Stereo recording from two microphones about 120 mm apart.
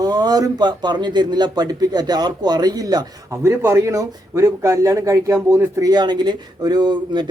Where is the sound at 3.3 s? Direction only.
20° right (ahead or behind).